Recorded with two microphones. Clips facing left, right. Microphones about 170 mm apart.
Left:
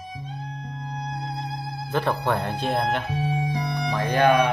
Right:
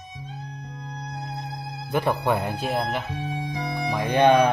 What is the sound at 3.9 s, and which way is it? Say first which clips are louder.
Speech: right 2 dB; 15° right (ahead or behind).